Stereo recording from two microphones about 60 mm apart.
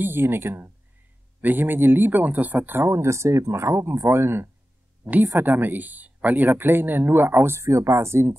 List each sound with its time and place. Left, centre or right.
0.0 s speech: right
5.4 s speech: right
7.4 s speech: right